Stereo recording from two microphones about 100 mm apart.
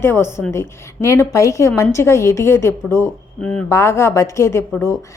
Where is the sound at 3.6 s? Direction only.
30° left (ahead or behind).